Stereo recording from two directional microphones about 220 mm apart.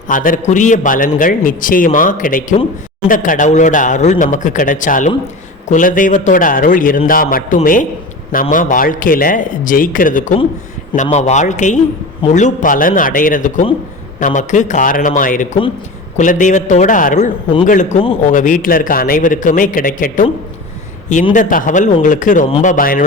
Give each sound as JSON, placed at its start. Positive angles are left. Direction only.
{"t": 0.1, "sound": "a man's voice", "side_deg": 35}
{"t": 22.4, "sound": "speech", "side_deg": 25}
{"t": 22.7, "sound": "a man's voice", "side_deg": 40}